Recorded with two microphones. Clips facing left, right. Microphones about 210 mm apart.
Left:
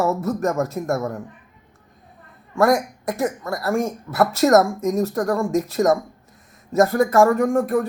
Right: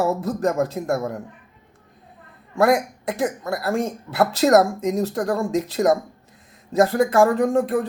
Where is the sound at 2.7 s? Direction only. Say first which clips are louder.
Even; 30° right (ahead or behind).